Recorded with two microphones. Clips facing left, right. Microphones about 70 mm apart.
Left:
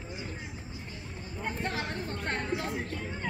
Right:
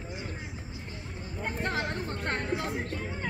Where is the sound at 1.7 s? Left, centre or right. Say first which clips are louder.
Right 2 dB; right.